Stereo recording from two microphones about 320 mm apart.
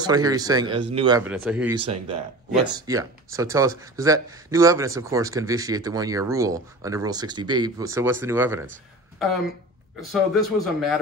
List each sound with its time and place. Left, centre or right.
0.0 s speech: centre
1.8 s speech: centre
9.9 s a man's voice: centre